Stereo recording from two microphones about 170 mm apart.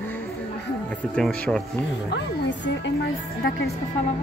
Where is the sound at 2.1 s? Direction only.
90° left.